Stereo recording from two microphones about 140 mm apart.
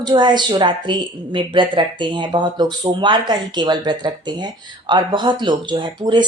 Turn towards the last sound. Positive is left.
turn(degrees=-35)  # may be behind; listen again after turning